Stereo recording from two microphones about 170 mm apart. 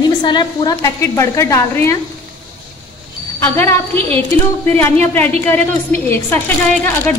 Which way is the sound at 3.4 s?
10° left (ahead or behind).